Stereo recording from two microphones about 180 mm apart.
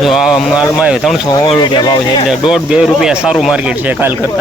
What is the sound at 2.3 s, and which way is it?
Speech, 5° right (ahead or behind).